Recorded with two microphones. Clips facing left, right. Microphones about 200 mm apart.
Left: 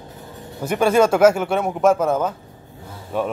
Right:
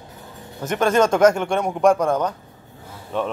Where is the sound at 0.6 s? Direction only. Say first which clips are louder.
Left 2 dB; 10° left (ahead or behind).